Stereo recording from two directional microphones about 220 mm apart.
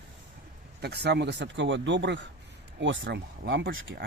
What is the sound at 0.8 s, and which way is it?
Speech, 50° right (ahead or behind).